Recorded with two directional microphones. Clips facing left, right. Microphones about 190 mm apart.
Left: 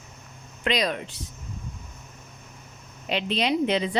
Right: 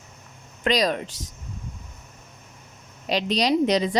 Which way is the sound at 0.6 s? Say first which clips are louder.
Right 3 dB; 40° right (ahead or behind).